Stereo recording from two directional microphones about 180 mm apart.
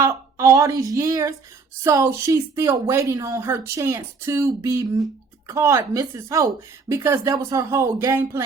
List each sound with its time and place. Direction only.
0.0 s speech: 15° right (ahead or behind)